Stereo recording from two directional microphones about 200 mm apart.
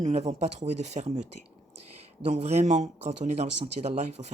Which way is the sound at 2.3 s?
30° right (ahead or behind).